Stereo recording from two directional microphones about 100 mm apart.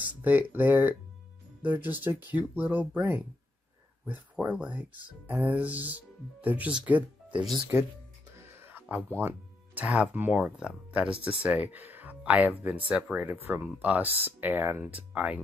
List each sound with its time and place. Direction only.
0.0 s speech: 15° right (ahead or behind)
8.4 s a sound: 25° right (ahead or behind)
9.2 s music: 20° right (ahead or behind)
9.8 s speech: 15° right (ahead or behind)